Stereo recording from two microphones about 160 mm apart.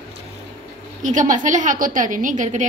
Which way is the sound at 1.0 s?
50° right (ahead or behind).